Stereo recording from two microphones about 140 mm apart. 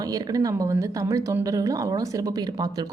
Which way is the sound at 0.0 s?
25° right (ahead or behind).